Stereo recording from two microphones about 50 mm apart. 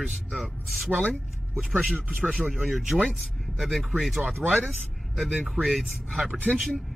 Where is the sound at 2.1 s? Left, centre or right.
Centre.